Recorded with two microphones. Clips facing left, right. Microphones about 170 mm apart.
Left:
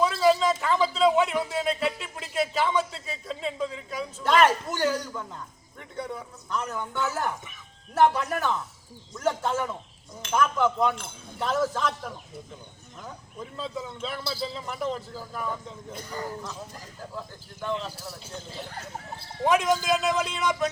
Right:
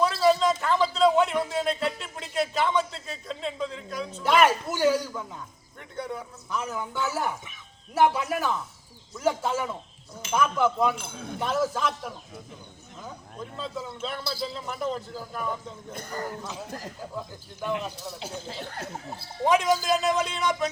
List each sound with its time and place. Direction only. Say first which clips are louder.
0.2 s a sound: even; 5° left (ahead or behind)
5.8 s speech: right 1 dB; centre (ahead or behind)
11.1 s speech: right 9 dB; 70° right (ahead or behind)
11.3 s speech: even; 5° right (ahead or behind)
16.0 s speech: right 1 dB; 45° right (ahead or behind)
16.4 s speech: right 3 dB; 5° right (ahead or behind)
19.5 s speech: even; centre (ahead or behind)